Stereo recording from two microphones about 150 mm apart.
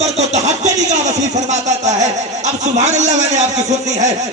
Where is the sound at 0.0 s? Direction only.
50° right (ahead or behind).